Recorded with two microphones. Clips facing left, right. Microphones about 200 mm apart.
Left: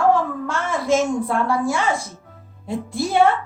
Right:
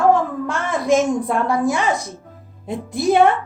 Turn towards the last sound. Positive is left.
turn(degrees=-20)  # may be behind; listen again after turning